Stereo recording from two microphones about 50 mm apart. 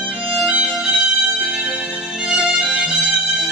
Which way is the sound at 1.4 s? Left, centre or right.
Centre.